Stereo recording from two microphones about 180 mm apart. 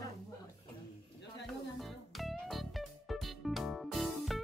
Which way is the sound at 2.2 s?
Centre (ahead or behind).